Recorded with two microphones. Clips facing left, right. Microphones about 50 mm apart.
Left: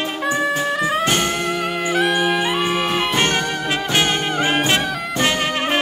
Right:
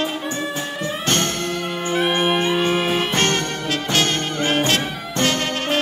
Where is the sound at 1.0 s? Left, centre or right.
Centre.